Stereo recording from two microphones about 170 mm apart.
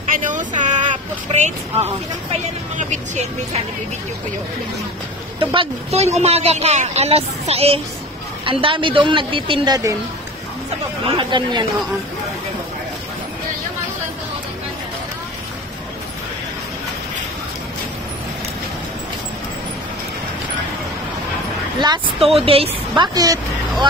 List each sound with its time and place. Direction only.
0.1 s speech: 50° right (ahead or behind)
5.4 s a woman's voice: 30° right (ahead or behind)
11.1 s a woman's voice: 30° right (ahead or behind)
21.7 s a woman's voice: 25° right (ahead or behind)
23.1 s a woman's voice: 20° right (ahead or behind)